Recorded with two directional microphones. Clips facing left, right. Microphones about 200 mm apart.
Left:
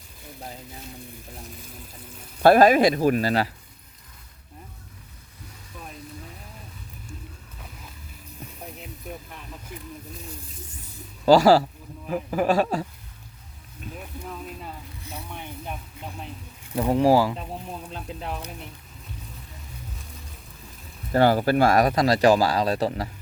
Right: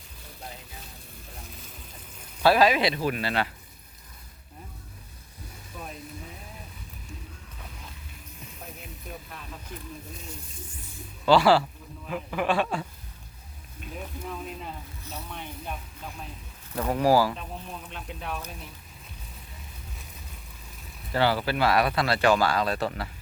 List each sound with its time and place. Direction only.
2.4 s speech: 50° left (ahead or behind)
9.7 s a sound: 10° left (ahead or behind)
11.3 s speech: 40° left (ahead or behind)
14.3 s zipper: 10° left (ahead or behind)
16.7 s speech: 20° left (ahead or behind)
21.1 s speech: 45° left (ahead or behind)